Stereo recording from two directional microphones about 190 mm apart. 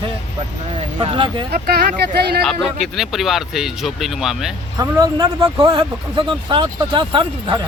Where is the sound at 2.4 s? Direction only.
Centre (ahead or behind).